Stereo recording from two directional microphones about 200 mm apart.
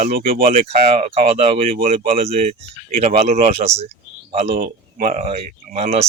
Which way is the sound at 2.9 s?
40° right (ahead or behind).